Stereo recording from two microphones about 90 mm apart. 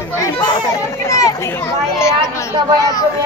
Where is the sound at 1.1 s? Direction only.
35° left (ahead or behind).